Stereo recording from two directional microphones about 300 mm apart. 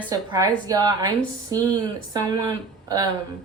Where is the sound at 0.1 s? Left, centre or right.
Centre.